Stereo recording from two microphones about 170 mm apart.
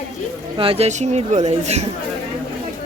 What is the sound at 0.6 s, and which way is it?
Speech, 35° right (ahead or behind).